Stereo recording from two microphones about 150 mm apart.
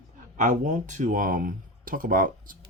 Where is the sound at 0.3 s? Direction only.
55° right (ahead or behind).